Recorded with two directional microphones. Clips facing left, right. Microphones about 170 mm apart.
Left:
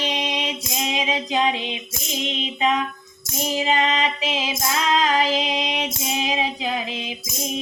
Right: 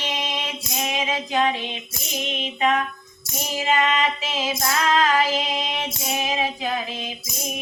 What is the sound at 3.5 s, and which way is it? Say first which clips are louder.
Female singing: even; 20° left (ahead or behind).